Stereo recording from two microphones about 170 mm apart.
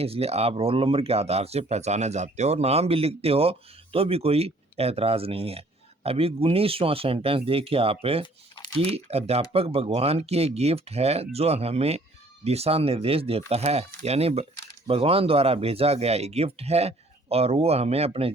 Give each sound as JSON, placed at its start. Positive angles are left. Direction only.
{"t": 0.0, "sound": "speech", "side_deg": -35}